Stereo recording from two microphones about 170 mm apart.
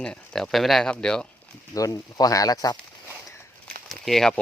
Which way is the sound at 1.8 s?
20° left (ahead or behind).